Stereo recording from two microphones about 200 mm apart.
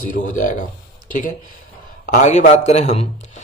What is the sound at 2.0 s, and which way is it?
Speech, 40° left (ahead or behind).